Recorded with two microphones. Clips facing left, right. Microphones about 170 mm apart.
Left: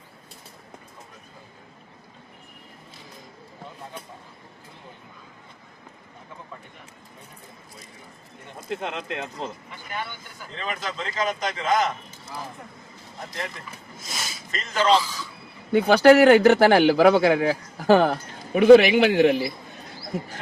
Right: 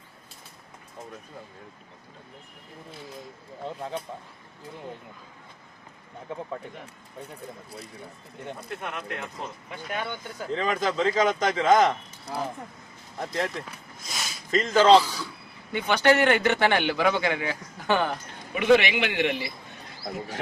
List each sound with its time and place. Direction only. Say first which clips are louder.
8.8 s speech: left 3 dB; 25° left (ahead or behind)
9.8 s speech: right 2 dB; 75° right (ahead or behind)
14.0 s a sound: left 1 dB; centre (ahead or behind)
14.6 s speech: right 4 dB; 65° right (ahead or behind)
15.7 s speech: left 7 dB; 35° left (ahead or behind)